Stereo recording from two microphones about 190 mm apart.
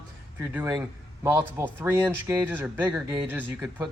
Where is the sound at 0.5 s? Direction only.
15° right (ahead or behind).